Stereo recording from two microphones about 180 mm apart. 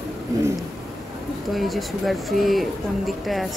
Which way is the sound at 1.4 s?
Centre (ahead or behind).